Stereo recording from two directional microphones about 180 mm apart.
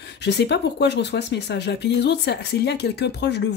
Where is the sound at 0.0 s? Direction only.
70° left (ahead or behind).